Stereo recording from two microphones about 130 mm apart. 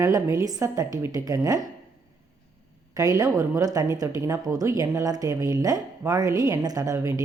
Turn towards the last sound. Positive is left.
turn(degrees=-25)  # may be behind; listen again after turning